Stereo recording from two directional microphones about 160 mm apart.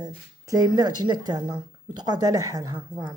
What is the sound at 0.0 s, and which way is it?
A woman's voice, 25° right (ahead or behind).